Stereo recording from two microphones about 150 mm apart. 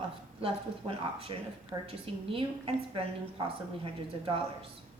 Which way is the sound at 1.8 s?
40° right (ahead or behind).